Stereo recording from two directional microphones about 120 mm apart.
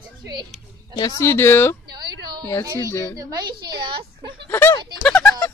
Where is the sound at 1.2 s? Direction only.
20° left (ahead or behind).